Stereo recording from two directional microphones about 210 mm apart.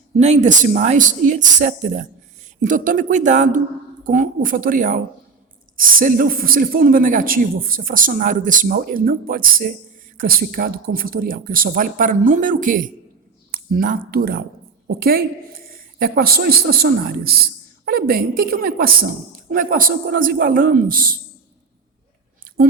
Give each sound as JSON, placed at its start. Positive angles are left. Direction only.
{"t": 0.2, "sound": "a man's voice", "side_deg": -35}